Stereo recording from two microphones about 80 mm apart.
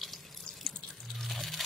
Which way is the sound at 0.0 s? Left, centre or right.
Centre.